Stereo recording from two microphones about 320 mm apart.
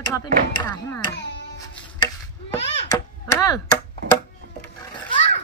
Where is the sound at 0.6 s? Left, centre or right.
Centre.